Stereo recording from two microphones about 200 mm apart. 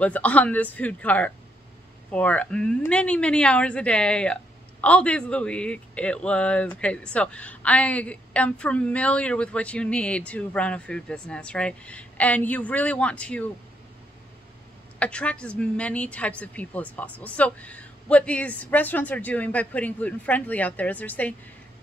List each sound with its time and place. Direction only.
0.0 s a woman's voice: 5° left (ahead or behind)
15.0 s a woman's voice: 5° left (ahead or behind)